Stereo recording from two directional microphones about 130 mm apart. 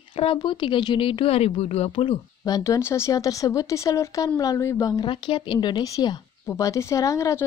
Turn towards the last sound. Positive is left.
turn(degrees=25)  # may be behind; listen again after turning